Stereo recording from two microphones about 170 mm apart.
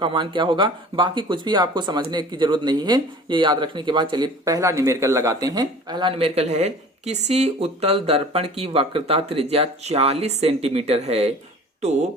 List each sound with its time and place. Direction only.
0.0 s speech: 30° right (ahead or behind)